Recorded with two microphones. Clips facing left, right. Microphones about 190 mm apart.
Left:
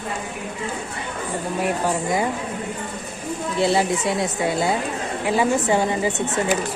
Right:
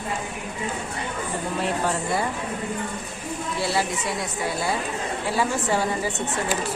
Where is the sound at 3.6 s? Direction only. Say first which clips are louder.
Left 7 dB; 20° left (ahead or behind).